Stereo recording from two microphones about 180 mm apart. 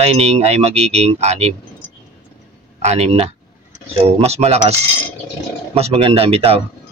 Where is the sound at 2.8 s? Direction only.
35° right (ahead or behind).